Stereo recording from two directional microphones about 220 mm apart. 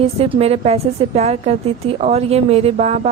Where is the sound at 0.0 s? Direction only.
30° right (ahead or behind).